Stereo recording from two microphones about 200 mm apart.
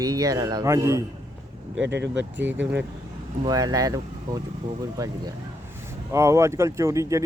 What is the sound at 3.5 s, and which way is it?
Speech, 20° right (ahead or behind).